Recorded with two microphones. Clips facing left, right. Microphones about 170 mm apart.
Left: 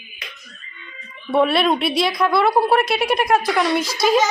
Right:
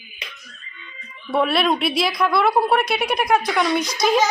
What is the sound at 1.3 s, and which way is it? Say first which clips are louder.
A woman's voice: left 2 dB; centre (ahead or behind).